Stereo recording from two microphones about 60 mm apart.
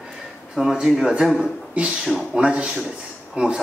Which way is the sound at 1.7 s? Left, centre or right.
Centre.